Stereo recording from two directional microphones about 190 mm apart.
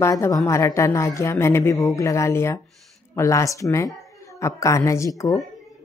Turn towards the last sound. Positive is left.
turn(degrees=15)  # may be behind; listen again after turning